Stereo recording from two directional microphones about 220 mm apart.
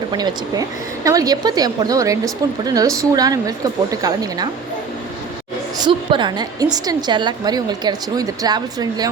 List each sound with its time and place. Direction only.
0.1 s a woman's voice: 20° right (ahead or behind)
5.8 s a woman's voice: 20° right (ahead or behind)